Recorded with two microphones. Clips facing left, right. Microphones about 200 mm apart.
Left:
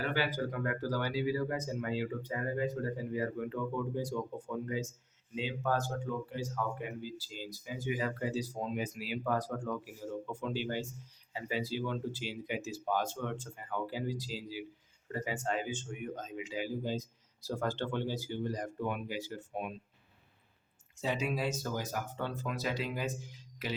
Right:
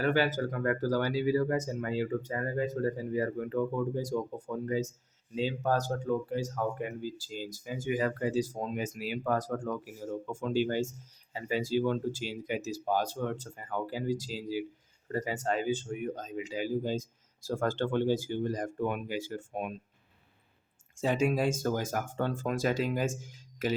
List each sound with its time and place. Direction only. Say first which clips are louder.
0.0 s speech: right 6 dB; 45° right (ahead or behind)
21.0 s speech: right 6 dB; 50° right (ahead or behind)